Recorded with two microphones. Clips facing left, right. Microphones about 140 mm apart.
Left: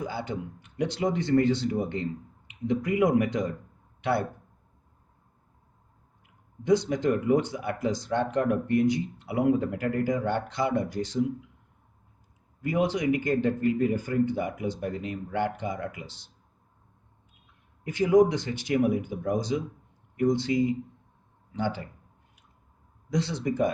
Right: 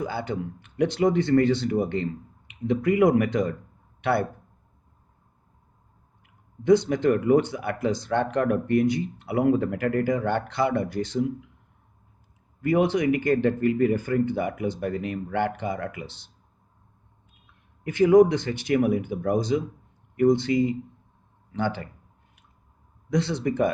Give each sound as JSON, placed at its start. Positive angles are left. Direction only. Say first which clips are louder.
{"t": 0.1, "sound": "speech", "louder": "right 3 dB", "side_deg": -65}
{"t": 6.7, "sound": "speech", "louder": "right 4 dB", "side_deg": -60}
{"t": 12.6, "sound": "speech", "louder": "right 4 dB", "side_deg": -60}
{"t": 17.4, "sound": "speech", "louder": "right 4 dB", "side_deg": -60}
{"t": 23.0, "sound": "speech", "louder": "right 3 dB", "side_deg": -60}